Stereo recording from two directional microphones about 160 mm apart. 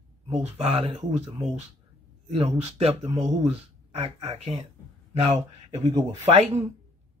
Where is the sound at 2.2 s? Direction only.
40° right (ahead or behind).